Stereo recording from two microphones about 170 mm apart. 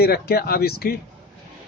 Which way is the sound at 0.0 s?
65° left (ahead or behind).